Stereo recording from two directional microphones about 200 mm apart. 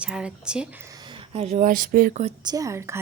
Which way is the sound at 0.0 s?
5° right (ahead or behind).